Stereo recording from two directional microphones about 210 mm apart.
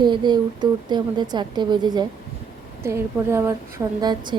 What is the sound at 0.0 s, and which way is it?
A woman's voice, 20° right (ahead or behind).